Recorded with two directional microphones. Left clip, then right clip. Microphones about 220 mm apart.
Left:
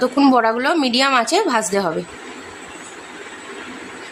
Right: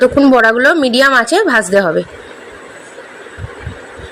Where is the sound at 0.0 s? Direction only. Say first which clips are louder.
Right 7 dB; 10° right (ahead or behind).